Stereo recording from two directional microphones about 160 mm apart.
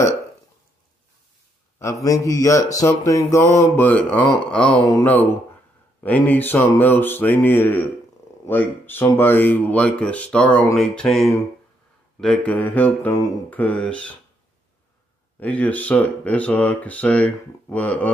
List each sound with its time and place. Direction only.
1.8 s a sound: 20° left (ahead or behind)
6.0 s speech: 10° left (ahead or behind)
15.4 s speech: 10° left (ahead or behind)